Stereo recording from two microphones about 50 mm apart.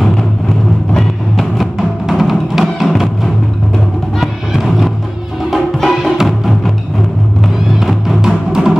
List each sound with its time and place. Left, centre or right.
0.0 s vehicle: centre
0.9 s music: centre
4.2 s music: centre
8.2 s music: centre